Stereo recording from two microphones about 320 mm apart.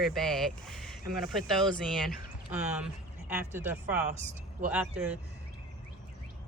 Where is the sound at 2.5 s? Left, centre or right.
Centre.